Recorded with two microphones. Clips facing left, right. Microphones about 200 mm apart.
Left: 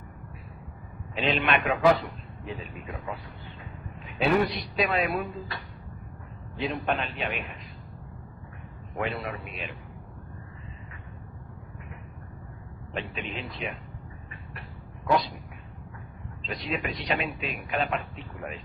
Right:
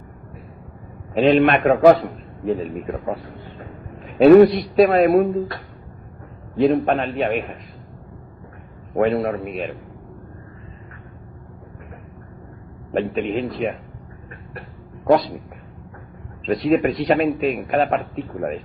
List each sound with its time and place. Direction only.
1.1 s a man's voice: 45° right (ahead or behind)
6.6 s a man's voice: 45° right (ahead or behind)
9.0 s a man's voice: 50° right (ahead or behind)
12.9 s a man's voice: 45° right (ahead or behind)
16.5 s a man's voice: 50° right (ahead or behind)